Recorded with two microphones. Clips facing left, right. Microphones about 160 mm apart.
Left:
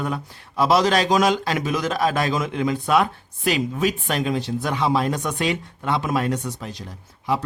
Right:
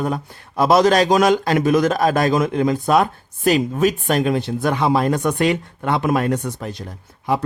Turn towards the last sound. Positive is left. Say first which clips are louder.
# right 3 dB
turn(degrees=-50)  # may be behind; listen again after turning